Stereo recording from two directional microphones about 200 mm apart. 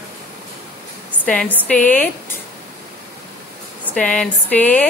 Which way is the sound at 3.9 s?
5° left (ahead or behind).